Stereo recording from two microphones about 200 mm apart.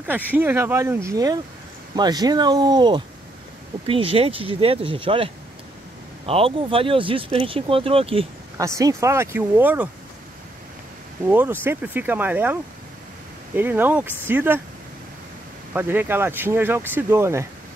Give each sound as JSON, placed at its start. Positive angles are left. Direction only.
{"t": 0.0, "sound": "speech", "side_deg": -10}
{"t": 8.5, "sound": "speech", "side_deg": -15}
{"t": 11.2, "sound": "speech", "side_deg": -10}
{"t": 13.6, "sound": "speech", "side_deg": -10}
{"t": 15.7, "sound": "speech", "side_deg": -10}